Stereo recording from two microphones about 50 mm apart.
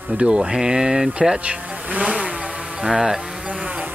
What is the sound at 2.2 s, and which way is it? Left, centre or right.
Vehicle, right.